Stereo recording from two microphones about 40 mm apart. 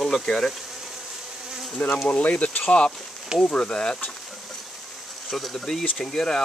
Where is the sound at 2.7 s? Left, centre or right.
Left.